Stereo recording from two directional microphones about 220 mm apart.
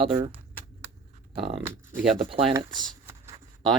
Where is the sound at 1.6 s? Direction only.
10° right (ahead or behind).